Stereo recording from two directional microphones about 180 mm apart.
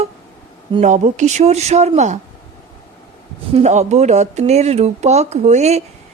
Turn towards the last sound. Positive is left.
turn(degrees=-35)  # may be behind; listen again after turning